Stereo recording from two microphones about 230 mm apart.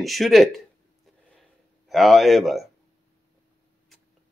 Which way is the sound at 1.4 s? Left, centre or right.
Centre.